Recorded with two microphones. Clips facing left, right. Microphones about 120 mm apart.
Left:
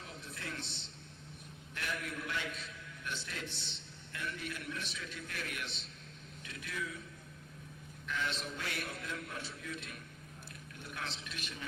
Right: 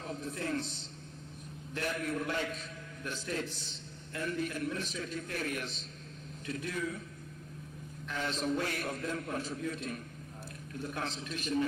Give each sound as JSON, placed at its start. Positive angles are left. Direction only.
{"t": 0.0, "sound": "a sound", "side_deg": -40}
{"t": 1.7, "sound": "a man's voice", "side_deg": -40}
{"t": 8.0, "sound": "a man's voice", "side_deg": -40}